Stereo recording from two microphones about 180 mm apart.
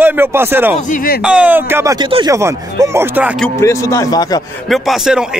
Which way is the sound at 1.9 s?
25° right (ahead or behind).